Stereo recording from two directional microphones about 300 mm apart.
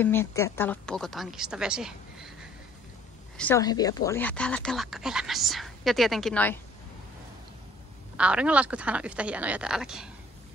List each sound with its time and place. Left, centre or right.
0.0 s speech: centre
3.3 s speech: centre
8.2 s speech: centre